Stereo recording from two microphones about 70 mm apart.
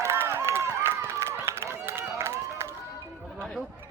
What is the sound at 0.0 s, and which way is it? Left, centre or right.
Run, right.